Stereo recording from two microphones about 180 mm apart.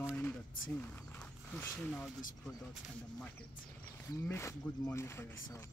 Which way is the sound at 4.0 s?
15° left (ahead or behind).